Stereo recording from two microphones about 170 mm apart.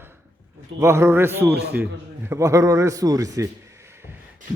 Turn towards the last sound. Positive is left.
turn(degrees=-15)  # may be behind; listen again after turning